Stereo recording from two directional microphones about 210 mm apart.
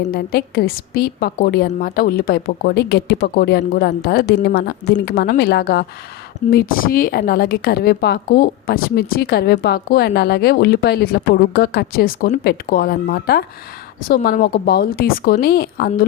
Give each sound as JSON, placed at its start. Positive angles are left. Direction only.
{"t": 0.0, "sound": "a woman's voice", "side_deg": 50}